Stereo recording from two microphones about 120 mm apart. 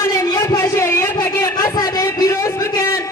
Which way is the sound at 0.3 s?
30° left (ahead or behind).